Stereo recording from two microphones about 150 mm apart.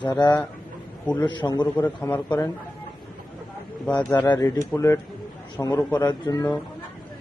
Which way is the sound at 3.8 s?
10° left (ahead or behind).